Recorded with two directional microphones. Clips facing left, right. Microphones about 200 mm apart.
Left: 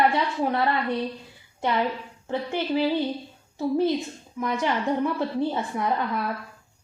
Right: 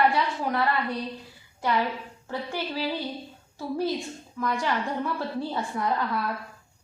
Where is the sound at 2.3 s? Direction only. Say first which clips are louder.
Left 6 dB; 20° left (ahead or behind).